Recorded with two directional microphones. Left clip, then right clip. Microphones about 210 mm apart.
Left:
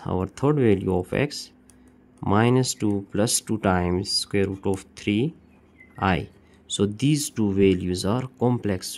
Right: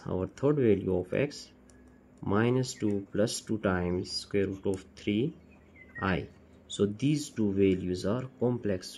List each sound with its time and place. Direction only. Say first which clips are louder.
0.0 s speech: left 5 dB; 45° left (ahead or behind)